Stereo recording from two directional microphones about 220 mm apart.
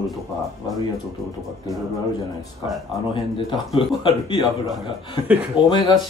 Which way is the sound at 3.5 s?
20° left (ahead or behind).